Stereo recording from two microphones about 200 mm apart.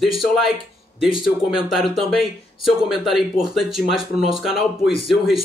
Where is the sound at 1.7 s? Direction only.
Centre (ahead or behind).